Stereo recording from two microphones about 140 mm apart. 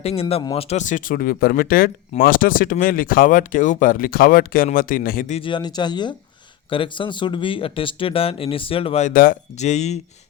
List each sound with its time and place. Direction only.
0.0 s speech: 45° left (ahead or behind); by 5.2 s 85° left
5.4 s speech: 35° left (ahead or behind)
9.0 s speech: 80° left
9.6 s speech: 55° left (ahead or behind)